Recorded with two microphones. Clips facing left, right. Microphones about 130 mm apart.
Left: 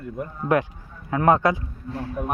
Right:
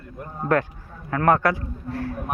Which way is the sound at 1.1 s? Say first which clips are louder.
Left 1 dB; 20° left (ahead or behind).